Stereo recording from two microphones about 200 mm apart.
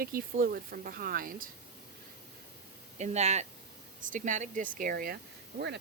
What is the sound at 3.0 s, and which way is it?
Speech, 35° right (ahead or behind).